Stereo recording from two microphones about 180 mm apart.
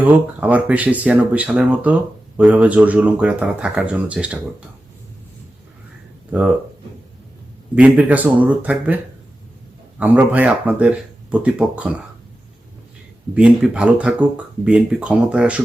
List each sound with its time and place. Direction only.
0.0 s speech: 10° right (ahead or behind)
6.3 s speech: 10° right (ahead or behind)
7.8 s speech: 10° right (ahead or behind)
10.0 s speech: 10° right (ahead or behind)
13.3 s speech: 5° right (ahead or behind)